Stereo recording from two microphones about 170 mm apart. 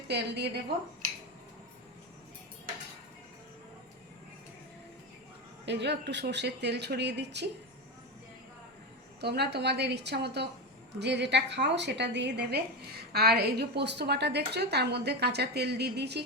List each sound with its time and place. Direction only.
0.1 s speech: 80° right
5.6 s speech: 85° right
9.2 s a woman's voice: 75° right (ahead or behind)
11.0 s a woman's voice: 90° right